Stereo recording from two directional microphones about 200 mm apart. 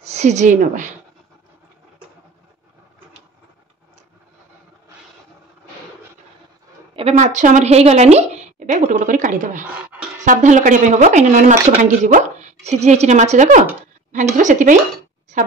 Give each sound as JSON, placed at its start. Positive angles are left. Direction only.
{"t": 0.1, "sound": "a woman's voice", "side_deg": -35}
{"t": 7.0, "sound": "a woman's voice", "side_deg": -35}